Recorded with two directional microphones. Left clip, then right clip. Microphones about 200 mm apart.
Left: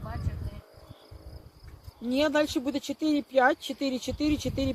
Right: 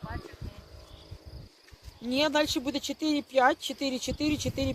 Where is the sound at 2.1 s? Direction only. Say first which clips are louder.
Left 1 dB; 40° left (ahead or behind).